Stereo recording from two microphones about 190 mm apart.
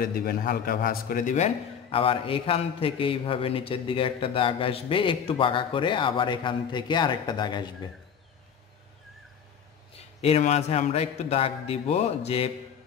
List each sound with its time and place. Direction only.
0.0 s speech: 50° left (ahead or behind); by 7.9 s 20° left (ahead or behind)
10.2 s a man's voice: 35° left (ahead or behind)